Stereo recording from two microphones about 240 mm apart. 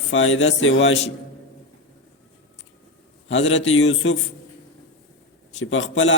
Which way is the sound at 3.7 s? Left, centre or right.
Left.